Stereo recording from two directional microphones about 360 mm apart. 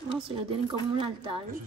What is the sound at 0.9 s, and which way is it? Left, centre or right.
Speech, centre.